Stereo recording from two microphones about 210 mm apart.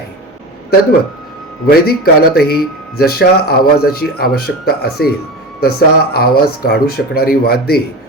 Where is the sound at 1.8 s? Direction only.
45° left (ahead or behind).